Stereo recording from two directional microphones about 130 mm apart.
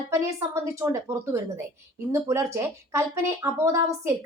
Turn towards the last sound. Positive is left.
turn(degrees=-20)  # may be behind; listen again after turning